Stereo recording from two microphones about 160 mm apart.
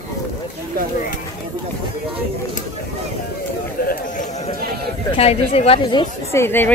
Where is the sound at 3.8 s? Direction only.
50° left (ahead or behind); by 6.4 s 25° left (ahead or behind).